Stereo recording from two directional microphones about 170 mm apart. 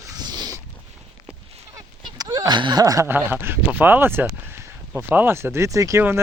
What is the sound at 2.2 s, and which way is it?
Speech, 20° right (ahead or behind).